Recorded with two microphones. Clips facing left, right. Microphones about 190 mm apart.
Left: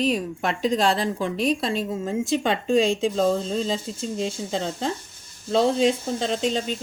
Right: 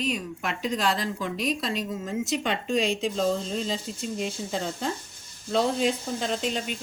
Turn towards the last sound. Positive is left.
turn(degrees=30)  # may be behind; listen again after turning